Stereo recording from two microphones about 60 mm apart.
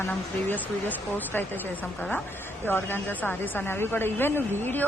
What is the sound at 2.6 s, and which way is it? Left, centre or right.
Speech, left.